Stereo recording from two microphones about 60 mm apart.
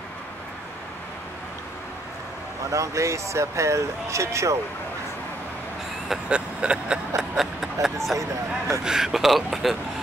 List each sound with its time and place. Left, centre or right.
2.7 s speech: right
6.0 s vehicle: centre
7.4 s speech: centre
8.2 s speech: right
8.8 s speech: centre